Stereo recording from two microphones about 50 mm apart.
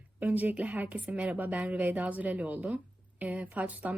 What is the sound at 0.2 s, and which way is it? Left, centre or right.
Speech, right.